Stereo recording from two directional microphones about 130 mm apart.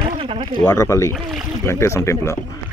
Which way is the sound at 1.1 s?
Centre (ahead or behind).